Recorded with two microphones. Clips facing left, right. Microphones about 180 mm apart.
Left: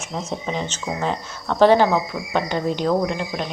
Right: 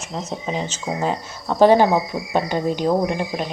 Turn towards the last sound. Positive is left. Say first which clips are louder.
# right 1 dB
turn(degrees=-15)  # may be behind; listen again after turning